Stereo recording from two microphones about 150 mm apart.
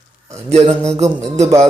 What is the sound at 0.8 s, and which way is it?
Speech, 45° right (ahead or behind).